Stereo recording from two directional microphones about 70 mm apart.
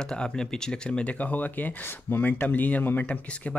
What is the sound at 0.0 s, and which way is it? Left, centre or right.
Speech, centre.